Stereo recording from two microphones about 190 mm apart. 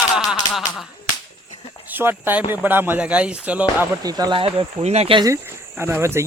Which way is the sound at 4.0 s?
20° right (ahead or behind).